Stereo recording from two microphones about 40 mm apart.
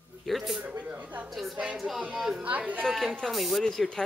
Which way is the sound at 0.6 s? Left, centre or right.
Right.